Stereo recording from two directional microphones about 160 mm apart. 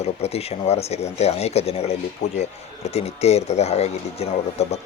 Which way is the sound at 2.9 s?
40° left (ahead or behind).